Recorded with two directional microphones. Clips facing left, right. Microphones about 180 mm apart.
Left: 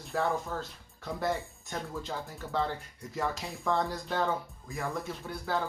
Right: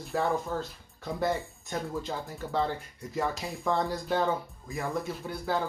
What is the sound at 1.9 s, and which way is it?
Speech, 15° right (ahead or behind).